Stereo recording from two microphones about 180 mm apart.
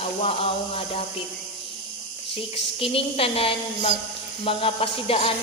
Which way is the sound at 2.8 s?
30° left (ahead or behind).